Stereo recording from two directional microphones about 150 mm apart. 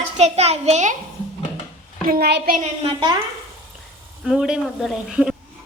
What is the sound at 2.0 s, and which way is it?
Speech, 85° right.